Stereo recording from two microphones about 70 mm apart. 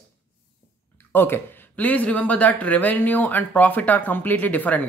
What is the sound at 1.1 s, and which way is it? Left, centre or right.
Speech, left.